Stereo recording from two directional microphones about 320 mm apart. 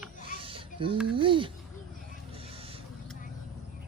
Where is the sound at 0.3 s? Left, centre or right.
Centre.